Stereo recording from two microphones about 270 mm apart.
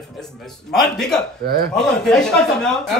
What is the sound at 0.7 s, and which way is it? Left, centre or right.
A man's voice, centre.